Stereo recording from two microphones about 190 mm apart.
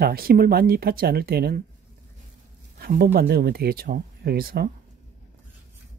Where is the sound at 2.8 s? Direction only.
55° right (ahead or behind).